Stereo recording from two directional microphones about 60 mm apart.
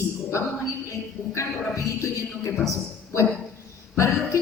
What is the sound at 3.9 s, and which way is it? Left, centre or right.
Speech, left.